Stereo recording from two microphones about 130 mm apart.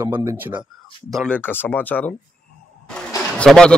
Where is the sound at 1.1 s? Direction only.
5° left (ahead or behind).